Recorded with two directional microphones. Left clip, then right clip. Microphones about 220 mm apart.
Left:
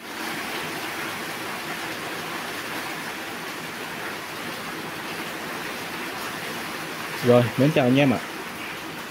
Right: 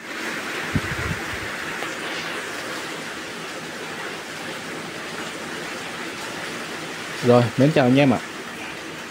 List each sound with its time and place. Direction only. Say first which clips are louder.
7.2 s speech: right 2 dB; 10° right (ahead or behind)